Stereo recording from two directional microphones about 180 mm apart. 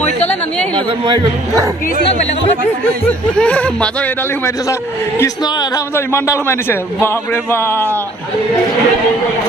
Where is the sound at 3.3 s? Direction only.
5° left (ahead or behind).